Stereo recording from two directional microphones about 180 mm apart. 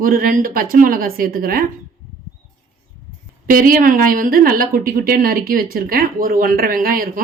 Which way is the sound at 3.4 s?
50° right (ahead or behind).